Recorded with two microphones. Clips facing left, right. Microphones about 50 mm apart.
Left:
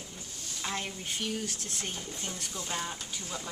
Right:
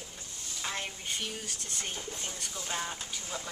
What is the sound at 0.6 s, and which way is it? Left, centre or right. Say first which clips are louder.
Speech: left 1 dB; centre.